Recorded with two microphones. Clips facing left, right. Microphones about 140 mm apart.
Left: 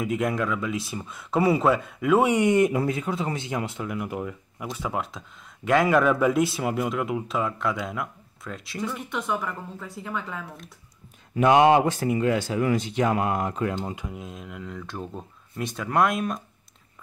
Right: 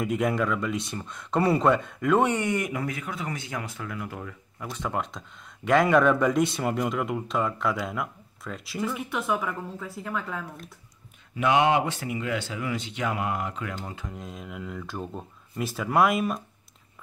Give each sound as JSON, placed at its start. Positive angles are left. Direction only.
{"t": 0.0, "sound": "speech", "side_deg": 0}
{"t": 11.3, "sound": "speech", "side_deg": 40}
{"t": 13.7, "sound": "speech", "side_deg": 20}
{"t": 14.0, "sound": "speech", "side_deg": 5}